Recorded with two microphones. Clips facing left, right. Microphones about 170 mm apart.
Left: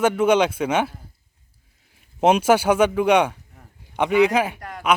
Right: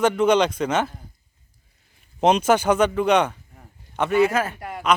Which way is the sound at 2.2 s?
10° left (ahead or behind).